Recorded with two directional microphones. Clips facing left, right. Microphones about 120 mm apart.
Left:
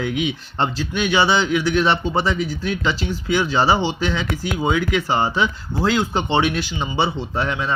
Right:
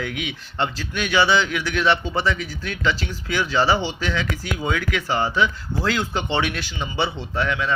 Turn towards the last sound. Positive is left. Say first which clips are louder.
# left 1 dB
turn(degrees=30)  # may be behind; listen again after turning